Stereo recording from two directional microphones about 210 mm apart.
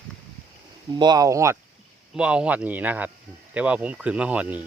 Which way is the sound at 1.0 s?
20° right (ahead or behind).